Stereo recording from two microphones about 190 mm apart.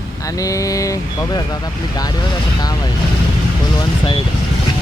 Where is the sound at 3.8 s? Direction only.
25° left (ahead or behind).